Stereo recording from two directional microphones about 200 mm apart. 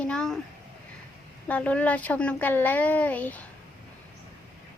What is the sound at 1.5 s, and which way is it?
Speech, 5° left (ahead or behind).